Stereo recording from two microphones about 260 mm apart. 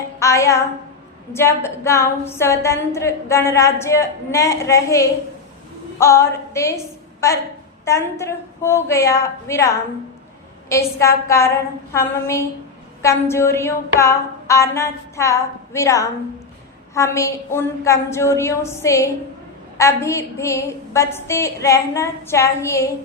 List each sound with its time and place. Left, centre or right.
0.2 s a woman's voice: centre
11.0 s a woman's voice: centre